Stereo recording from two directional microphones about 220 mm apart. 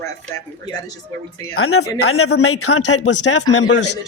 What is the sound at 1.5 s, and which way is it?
Speech, 75° left (ahead or behind).